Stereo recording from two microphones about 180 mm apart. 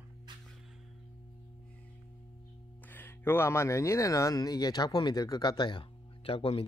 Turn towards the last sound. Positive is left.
turn(degrees=30)  # may be behind; listen again after turning